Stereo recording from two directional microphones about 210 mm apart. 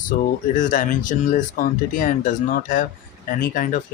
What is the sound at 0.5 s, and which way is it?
Speech, 40° left (ahead or behind).